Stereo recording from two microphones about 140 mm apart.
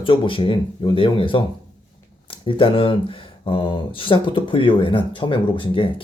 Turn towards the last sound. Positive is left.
turn(degrees=40)  # may be behind; listen again after turning